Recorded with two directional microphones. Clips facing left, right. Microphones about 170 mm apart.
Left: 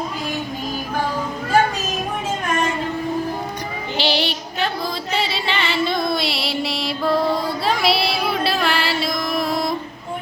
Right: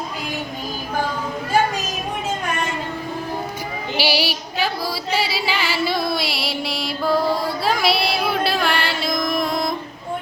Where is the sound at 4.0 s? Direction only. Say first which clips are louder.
Even; 5° right (ahead or behind).